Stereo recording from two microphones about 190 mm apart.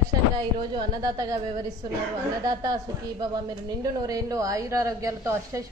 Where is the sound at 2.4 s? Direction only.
20° right (ahead or behind).